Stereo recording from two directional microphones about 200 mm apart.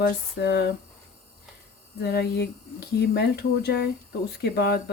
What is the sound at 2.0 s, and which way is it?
Speech, 55° left (ahead or behind).